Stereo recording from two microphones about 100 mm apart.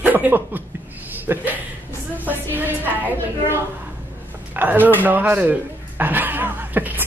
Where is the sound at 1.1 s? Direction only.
20° right (ahead or behind).